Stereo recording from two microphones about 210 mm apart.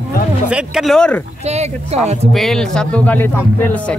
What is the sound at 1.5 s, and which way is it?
Speech, 30° right (ahead or behind).